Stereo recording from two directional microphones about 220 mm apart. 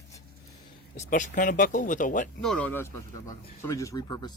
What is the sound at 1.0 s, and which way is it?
Speech, 35° left (ahead or behind).